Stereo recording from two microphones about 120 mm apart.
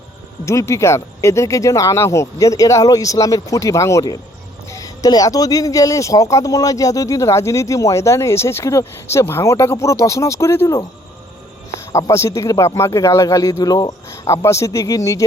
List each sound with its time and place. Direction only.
0.4 s speech: 25° left (ahead or behind)
11.9 s speech: 25° left (ahead or behind)